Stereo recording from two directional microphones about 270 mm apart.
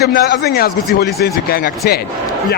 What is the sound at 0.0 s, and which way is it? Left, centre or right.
A man's voice, left.